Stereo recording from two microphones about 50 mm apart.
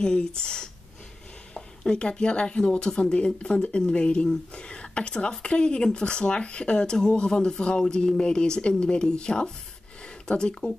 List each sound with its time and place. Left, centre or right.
0.0 s speech: centre